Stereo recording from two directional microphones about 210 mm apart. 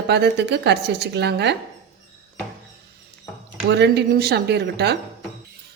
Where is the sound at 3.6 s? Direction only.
55° right (ahead or behind).